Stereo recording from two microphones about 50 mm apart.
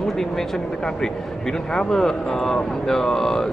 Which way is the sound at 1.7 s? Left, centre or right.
Centre.